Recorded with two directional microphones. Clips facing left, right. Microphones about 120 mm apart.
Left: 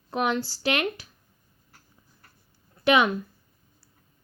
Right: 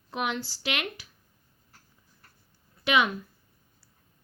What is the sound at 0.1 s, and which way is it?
Speech, 45° left (ahead or behind).